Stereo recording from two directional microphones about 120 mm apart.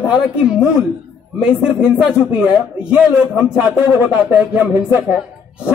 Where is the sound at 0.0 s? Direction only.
10° right (ahead or behind).